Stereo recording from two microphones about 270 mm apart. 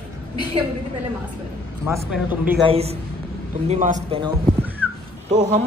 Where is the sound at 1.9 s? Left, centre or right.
Centre.